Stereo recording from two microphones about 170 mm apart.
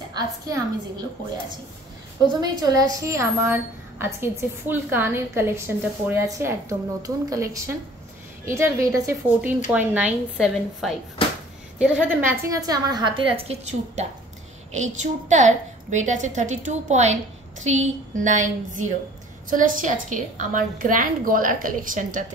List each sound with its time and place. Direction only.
0.1 s a woman's voice: 25° right (ahead or behind)
2.2 s a woman's voice: 20° right (ahead or behind); by 22.2 s 50° right (ahead or behind)